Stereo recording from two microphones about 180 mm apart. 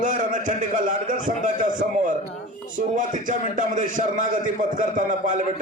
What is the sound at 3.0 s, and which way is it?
A man's voice, 45° right (ahead or behind).